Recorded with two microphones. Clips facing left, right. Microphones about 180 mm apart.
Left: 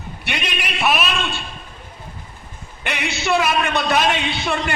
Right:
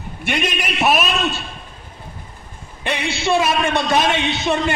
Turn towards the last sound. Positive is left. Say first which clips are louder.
# right 3 dB
turn(degrees=-25)  # may be behind; listen again after turning